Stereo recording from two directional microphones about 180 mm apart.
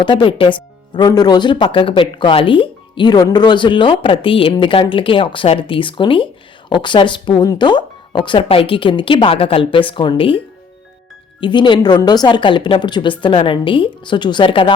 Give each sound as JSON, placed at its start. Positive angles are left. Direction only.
{"t": 0.0, "sound": "speech", "side_deg": 30}